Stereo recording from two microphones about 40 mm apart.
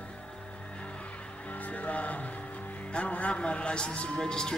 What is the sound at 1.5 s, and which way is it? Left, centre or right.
Music, left.